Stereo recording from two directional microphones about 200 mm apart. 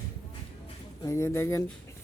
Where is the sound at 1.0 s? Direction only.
15° left (ahead or behind).